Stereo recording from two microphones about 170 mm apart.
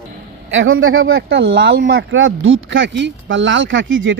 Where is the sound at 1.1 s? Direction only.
90° right.